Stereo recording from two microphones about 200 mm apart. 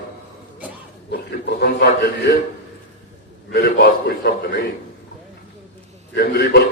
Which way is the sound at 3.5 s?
55° left (ahead or behind).